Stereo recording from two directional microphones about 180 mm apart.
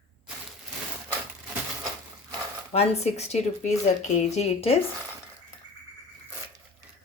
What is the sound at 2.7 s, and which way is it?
Speech, 35° left (ahead or behind).